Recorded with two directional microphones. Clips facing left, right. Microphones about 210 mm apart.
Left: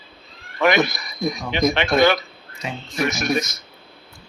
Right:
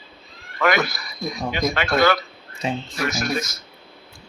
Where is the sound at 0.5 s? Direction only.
20° left (ahead or behind).